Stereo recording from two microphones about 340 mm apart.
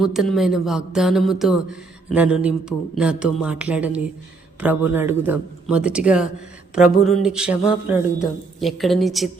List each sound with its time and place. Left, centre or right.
0.0 s speech: centre